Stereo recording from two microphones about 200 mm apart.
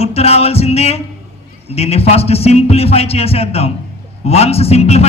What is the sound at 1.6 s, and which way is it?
A man's voice, 30° left (ahead or behind).